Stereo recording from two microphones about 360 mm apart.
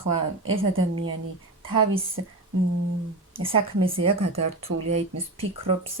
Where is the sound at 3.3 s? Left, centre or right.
Centre.